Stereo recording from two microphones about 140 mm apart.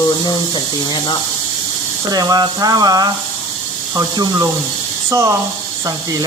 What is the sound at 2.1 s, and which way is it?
Speech, 25° right (ahead or behind).